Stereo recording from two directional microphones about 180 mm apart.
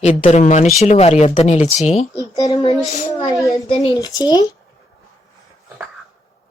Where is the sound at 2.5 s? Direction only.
30° left (ahead or behind).